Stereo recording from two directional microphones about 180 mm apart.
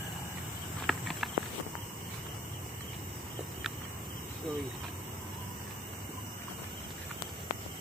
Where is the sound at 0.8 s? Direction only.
Centre (ahead or behind).